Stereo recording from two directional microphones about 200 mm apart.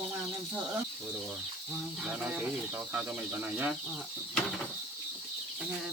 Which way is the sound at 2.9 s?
5° right (ahead or behind).